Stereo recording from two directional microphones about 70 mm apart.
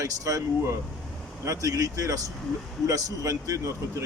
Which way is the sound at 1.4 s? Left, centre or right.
Right.